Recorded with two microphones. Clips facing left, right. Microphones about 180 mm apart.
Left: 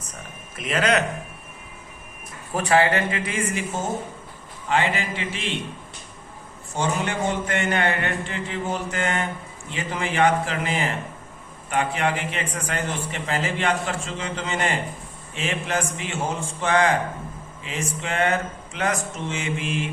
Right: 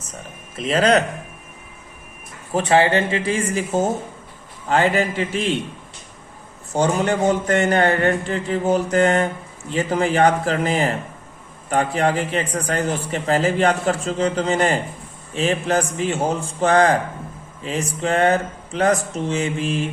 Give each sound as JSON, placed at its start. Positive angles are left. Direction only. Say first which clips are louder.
{"t": 0.5, "sound": "speech", "louder": "right 5 dB", "side_deg": -30}
{"t": 2.5, "sound": "speech", "louder": "right 3 dB", "side_deg": -25}
{"t": 4.7, "sound": "speech", "louder": "right 6 dB", "side_deg": -40}
{"t": 6.7, "sound": "speech", "louder": "right 6 dB", "side_deg": -40}